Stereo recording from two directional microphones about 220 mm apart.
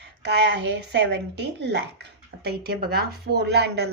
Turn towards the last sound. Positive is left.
turn(degrees=-50)  # may be behind; listen again after turning